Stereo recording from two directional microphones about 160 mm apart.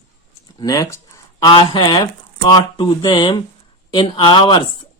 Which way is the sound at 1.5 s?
25° left (ahead or behind).